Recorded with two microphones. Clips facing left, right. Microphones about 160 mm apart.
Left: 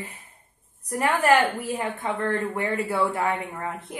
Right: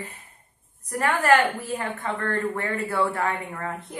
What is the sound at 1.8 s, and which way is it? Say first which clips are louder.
Speech: left 2 dB; 15° left (ahead or behind).